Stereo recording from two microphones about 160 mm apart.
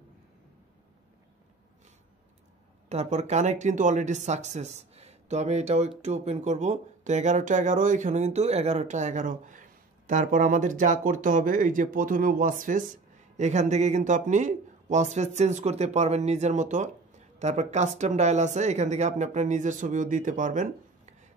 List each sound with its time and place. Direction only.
2.9 s speech: 45° right (ahead or behind)
13.4 s speech: 45° right (ahead or behind)